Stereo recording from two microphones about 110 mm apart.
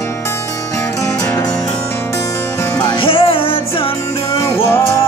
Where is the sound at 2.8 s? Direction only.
55° left (ahead or behind).